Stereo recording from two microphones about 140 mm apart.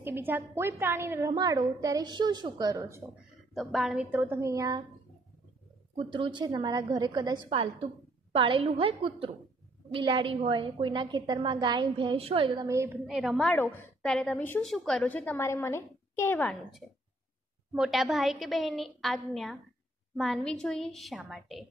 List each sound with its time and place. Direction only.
0.0 s a woman's voice: 15° right (ahead or behind)
2.8 s a woman's voice: 15° right (ahead or behind)
3.5 s a woman's voice: centre (ahead or behind)
4.2 s a woman's voice: 20° right (ahead or behind)
5.9 s a woman's voice: 40° right (ahead or behind)
12.6 s a woman's voice: 20° right (ahead or behind)
13.0 s a woman's voice: 5° right (ahead or behind)
13.5 s a woman's voice: 10° left (ahead or behind)
14.6 s a woman's voice: centre (ahead or behind); by 16.4 s 15° left (ahead or behind)
16.8 s a woman's voice: centre (ahead or behind)